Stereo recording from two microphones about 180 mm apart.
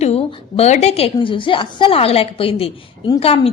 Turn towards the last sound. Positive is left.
turn(degrees=35)  # may be behind; listen again after turning